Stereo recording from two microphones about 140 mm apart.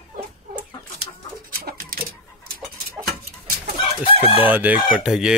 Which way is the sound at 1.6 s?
90° right.